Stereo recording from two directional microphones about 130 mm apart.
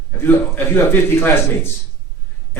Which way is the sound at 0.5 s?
15° left (ahead or behind).